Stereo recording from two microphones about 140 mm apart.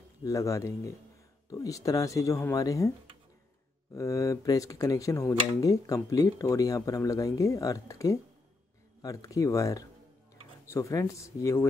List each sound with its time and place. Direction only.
0.2 s speech: 20° left (ahead or behind)
3.9 s speech: 20° left (ahead or behind)